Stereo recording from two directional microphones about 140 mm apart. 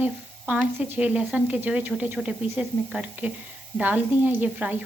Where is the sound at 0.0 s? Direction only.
10° right (ahead or behind).